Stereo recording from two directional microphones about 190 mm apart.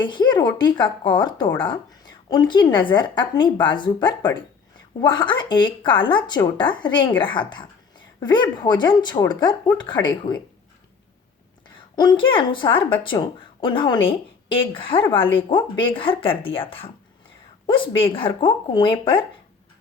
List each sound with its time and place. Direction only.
0.0 s a woman's voice: 25° left (ahead or behind)
11.9 s a woman's voice: 25° left (ahead or behind)